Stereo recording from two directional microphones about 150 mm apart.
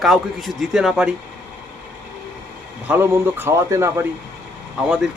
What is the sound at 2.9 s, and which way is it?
Speech, 15° right (ahead or behind).